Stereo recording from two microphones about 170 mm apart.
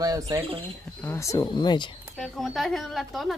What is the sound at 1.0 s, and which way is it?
Speech, 15° left (ahead or behind).